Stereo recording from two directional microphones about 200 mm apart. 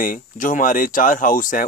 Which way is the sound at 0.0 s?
40° left (ahead or behind).